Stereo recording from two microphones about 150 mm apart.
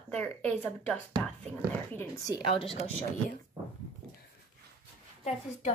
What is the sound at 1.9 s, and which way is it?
Speech, 20° left (ahead or behind).